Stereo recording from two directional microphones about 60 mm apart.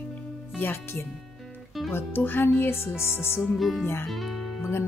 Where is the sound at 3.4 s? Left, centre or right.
Centre.